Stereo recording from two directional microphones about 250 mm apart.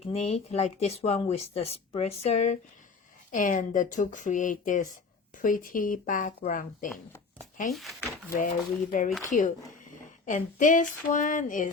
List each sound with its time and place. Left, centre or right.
0.0 s speech: left
7.7 s speech: centre
8.3 s speech: left